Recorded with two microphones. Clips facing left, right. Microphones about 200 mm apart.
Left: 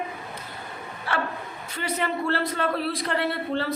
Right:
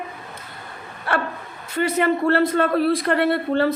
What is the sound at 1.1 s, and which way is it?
A woman's voice, 60° right (ahead or behind).